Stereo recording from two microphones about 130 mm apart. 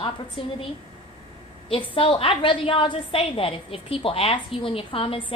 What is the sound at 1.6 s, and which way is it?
A woman's voice, 40° left (ahead or behind).